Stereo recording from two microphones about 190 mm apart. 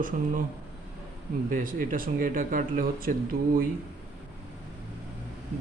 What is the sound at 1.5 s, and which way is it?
A man's voice, 45° right (ahead or behind).